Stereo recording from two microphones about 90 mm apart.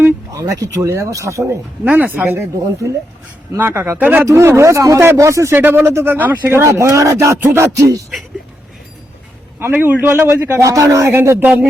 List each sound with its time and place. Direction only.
0.3 s speech: 35° right (ahead or behind)
1.8 s speech: 20° right (ahead or behind)
4.3 s speech: 30° right (ahead or behind)
5.5 s speech: 25° right (ahead or behind); by 8.0 s 40° right (ahead or behind)
9.6 s speech: 25° right (ahead or behind)
10.6 s speech: 35° right (ahead or behind)